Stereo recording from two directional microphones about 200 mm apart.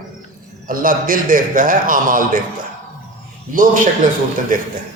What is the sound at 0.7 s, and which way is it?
A man's voice, 45° right (ahead or behind).